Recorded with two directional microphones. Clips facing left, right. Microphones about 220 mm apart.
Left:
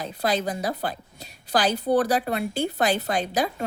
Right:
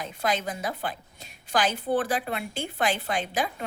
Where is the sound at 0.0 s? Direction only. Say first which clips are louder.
Left 3 dB; 35° left (ahead or behind).